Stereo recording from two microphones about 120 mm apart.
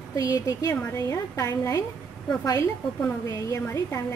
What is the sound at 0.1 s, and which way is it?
Speech, 25° left (ahead or behind).